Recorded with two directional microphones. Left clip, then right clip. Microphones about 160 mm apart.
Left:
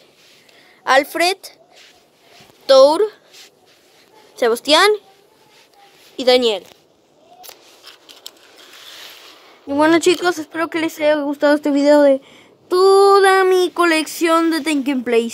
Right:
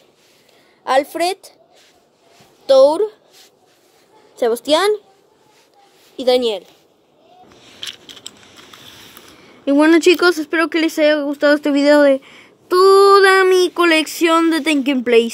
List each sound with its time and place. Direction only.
0.8 s a woman's voice: 20° right (ahead or behind)
2.6 s speech: 10° right (ahead or behind)
4.4 s speech: 15° right (ahead or behind)
6.1 s speech: 10° right (ahead or behind)
9.7 s speech: centre (ahead or behind)